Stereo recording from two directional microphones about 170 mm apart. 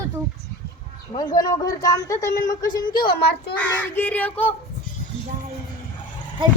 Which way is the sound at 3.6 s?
10° left (ahead or behind).